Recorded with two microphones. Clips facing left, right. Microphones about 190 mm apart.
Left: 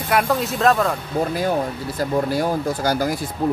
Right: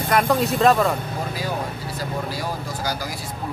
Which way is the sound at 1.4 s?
50° left (ahead or behind).